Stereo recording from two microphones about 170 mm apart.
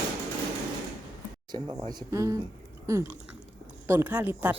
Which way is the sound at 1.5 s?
25° right (ahead or behind).